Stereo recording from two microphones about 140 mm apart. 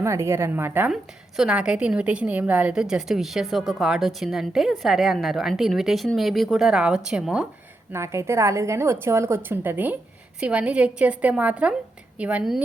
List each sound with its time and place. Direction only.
0.0 s a woman's voice: 20° right (ahead or behind)
7.9 s a woman's voice: 20° right (ahead or behind)